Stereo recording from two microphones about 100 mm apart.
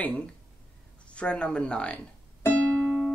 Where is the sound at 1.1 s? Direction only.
10° left (ahead or behind).